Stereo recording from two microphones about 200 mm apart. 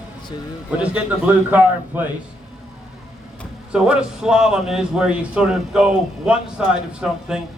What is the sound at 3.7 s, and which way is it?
A man's voice, 5° right (ahead or behind).